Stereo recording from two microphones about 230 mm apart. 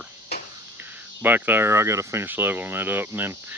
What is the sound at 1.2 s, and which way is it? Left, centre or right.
Speech, centre.